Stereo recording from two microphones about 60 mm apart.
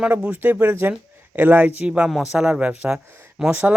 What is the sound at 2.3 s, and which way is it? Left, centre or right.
Speech, centre.